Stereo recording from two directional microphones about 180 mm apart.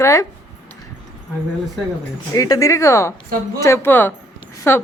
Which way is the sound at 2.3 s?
20° left (ahead or behind).